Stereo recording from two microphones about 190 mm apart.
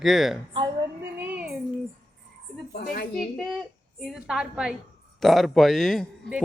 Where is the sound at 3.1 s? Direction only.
Centre (ahead or behind).